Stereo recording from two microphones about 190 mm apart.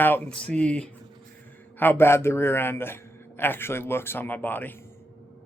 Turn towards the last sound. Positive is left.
turn(degrees=10)  # may be behind; listen again after turning